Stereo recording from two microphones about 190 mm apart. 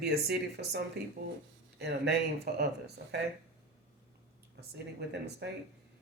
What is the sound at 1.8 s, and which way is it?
Speech, 60° right (ahead or behind).